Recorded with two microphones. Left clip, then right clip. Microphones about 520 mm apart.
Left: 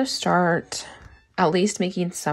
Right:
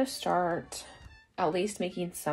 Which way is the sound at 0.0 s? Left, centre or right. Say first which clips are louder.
Left 8 dB; centre.